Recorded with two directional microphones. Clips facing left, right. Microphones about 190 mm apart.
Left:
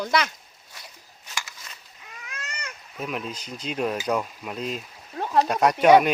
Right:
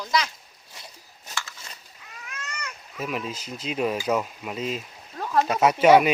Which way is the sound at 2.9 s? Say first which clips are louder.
Right 1 dB; centre (ahead or behind).